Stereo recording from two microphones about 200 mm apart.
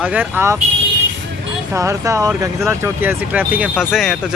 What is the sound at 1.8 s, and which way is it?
Speech, 15° right (ahead or behind).